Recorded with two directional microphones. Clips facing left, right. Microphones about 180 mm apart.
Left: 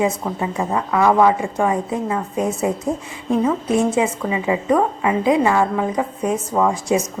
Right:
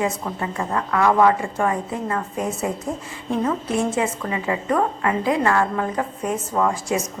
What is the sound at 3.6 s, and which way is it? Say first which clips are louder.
A woman's voice: left 4 dB; 15° left (ahead or behind).